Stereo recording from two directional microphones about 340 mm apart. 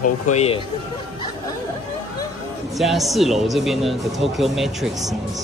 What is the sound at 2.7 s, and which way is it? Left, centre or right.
Speech, centre.